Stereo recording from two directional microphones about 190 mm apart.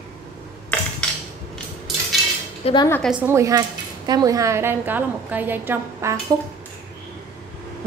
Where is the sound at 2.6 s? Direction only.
25° left (ahead or behind).